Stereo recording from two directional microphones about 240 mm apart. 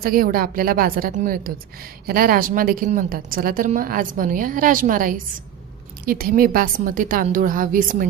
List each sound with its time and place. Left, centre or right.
0.0 s a woman's voice: right